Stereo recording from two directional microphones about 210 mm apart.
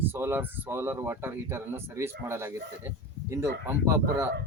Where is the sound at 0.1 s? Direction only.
10° right (ahead or behind).